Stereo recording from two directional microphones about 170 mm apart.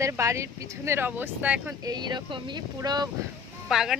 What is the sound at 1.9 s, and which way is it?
Speech, 25° right (ahead or behind).